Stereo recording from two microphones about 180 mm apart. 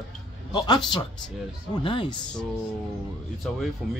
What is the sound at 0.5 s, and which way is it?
Speech, 25° left (ahead or behind).